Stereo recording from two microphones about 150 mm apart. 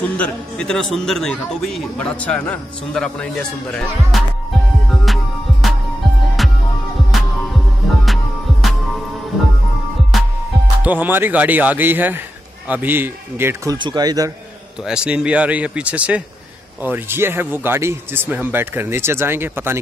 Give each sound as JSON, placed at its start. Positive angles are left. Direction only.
{"t": 0.2, "sound": "a man's voice", "side_deg": 5}
{"t": 5.0, "sound": "music", "side_deg": 0}
{"t": 7.1, "sound": "music", "side_deg": 0}
{"t": 10.8, "sound": "speech", "side_deg": -10}
{"t": 13.7, "sound": "speech", "side_deg": -30}
{"t": 14.9, "sound": "speech", "side_deg": -5}